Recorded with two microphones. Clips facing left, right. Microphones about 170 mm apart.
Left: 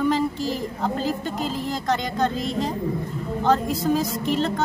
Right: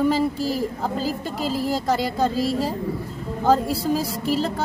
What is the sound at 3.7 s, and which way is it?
Speech, 10° right (ahead or behind).